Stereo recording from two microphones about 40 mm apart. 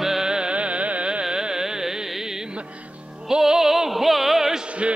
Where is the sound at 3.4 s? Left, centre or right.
Centre.